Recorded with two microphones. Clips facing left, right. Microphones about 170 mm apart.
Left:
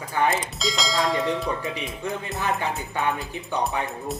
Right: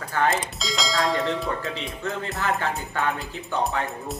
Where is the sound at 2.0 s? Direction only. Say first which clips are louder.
Right 1 dB; 15° left (ahead or behind).